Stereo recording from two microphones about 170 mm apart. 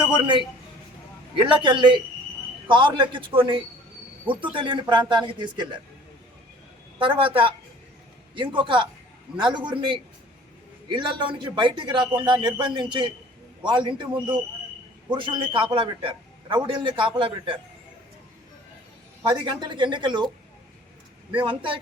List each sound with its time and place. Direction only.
1.4 s speech: 30° right (ahead or behind)
7.0 s a man's voice: 30° right (ahead or behind)
19.2 s speech: 25° right (ahead or behind)
21.3 s speech: 30° right (ahead or behind)